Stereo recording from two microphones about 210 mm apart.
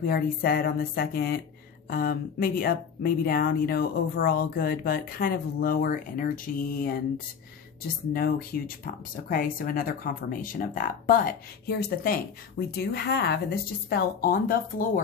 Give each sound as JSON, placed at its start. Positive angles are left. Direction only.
{"t": 0.0, "sound": "speech", "side_deg": 45}
{"t": 8.1, "sound": "speech", "side_deg": 45}